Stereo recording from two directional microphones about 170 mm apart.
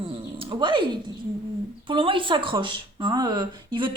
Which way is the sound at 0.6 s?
30° right (ahead or behind).